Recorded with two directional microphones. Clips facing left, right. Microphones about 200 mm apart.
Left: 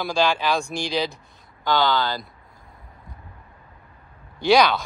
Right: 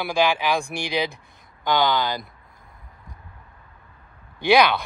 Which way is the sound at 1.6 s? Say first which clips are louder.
Even; 15° right (ahead or behind).